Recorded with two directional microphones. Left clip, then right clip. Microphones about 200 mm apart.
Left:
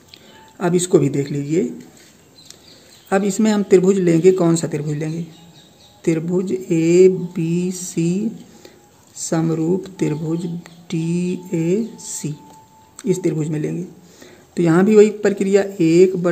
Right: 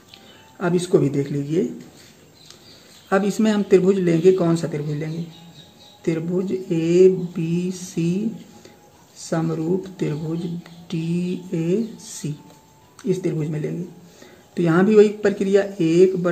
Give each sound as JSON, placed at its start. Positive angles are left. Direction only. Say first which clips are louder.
{"t": 0.1, "sound": "speech", "louder": "left 2 dB", "side_deg": 30}
{"t": 3.1, "sound": "speech", "louder": "left 2 dB", "side_deg": 25}
{"t": 10.6, "sound": "a sound", "louder": "left 4 dB", "side_deg": 30}
{"t": 11.5, "sound": "speech", "louder": "left 3 dB", "side_deg": 25}